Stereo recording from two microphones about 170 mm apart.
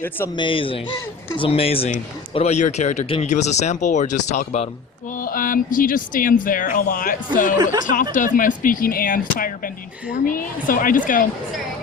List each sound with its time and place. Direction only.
0.3 s speech: 30° left (ahead or behind)
5.1 s speech: 55° left (ahead or behind)
7.6 s speech: 25° right (ahead or behind)
7.9 s speech: 50° left (ahead or behind)